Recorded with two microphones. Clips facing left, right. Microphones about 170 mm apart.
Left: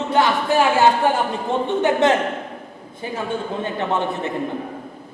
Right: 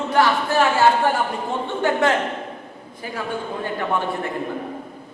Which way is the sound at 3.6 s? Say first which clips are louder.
Even; 20° left (ahead or behind).